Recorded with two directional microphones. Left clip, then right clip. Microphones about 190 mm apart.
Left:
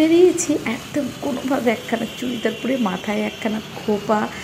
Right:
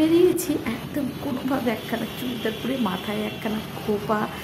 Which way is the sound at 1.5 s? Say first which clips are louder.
Left 6 dB; 15° left (ahead or behind).